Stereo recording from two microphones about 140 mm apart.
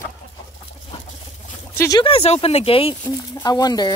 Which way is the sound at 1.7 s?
20° left (ahead or behind).